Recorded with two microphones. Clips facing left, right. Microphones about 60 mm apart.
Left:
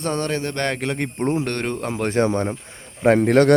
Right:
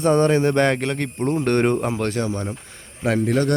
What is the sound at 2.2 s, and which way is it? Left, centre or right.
A man's voice, left.